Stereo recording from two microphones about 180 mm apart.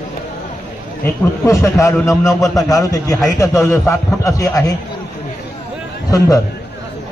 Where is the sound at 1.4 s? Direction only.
15° left (ahead or behind).